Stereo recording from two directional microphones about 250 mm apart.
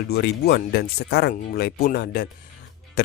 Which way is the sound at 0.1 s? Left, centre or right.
Left.